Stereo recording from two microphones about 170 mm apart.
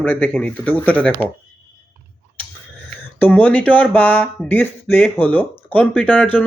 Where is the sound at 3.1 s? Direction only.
10° left (ahead or behind).